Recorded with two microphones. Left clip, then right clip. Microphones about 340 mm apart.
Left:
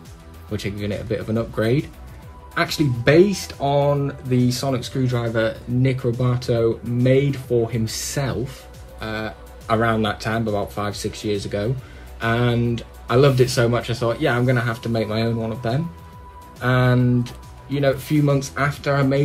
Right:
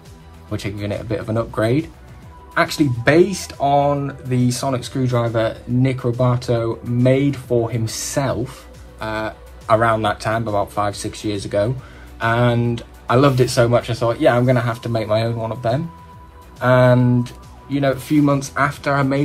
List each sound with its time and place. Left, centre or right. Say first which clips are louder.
0.5 s speech: right 2 dB; centre